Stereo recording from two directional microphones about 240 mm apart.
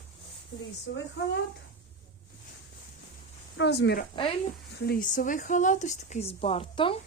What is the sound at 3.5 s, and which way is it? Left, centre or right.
Speech, left.